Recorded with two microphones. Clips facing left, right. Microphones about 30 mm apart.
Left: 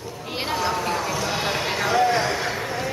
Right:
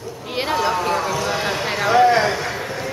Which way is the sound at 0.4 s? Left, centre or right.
Centre.